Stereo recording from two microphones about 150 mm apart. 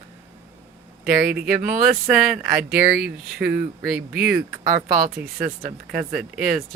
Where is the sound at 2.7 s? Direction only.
90° right.